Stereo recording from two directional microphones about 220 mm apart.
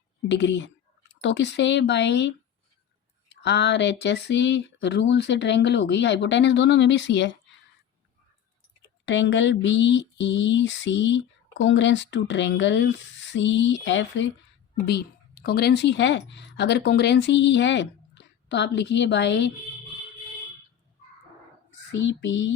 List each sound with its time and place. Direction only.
0.3 s speech: 55° left (ahead or behind)
3.4 s speech: 50° left (ahead or behind)
9.0 s a woman's voice: 55° left (ahead or behind)
22.0 s speech: 55° left (ahead or behind)